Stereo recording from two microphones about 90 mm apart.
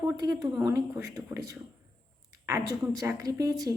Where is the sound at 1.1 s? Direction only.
35° right (ahead or behind).